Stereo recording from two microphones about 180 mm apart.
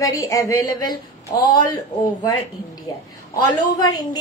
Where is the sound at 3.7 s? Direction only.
20° left (ahead or behind).